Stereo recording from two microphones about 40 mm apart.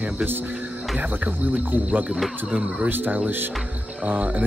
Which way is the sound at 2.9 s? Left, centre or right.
Right.